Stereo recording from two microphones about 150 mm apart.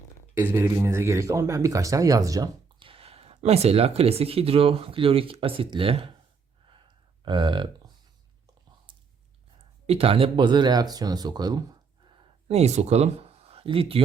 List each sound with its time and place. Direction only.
0.3 s speech: 15° right (ahead or behind)
2.7 s speech: 35° right (ahead or behind)
7.3 s speech: 30° right (ahead or behind)
9.8 s speech: 40° right (ahead or behind)
12.1 s a sound: 45° right (ahead or behind)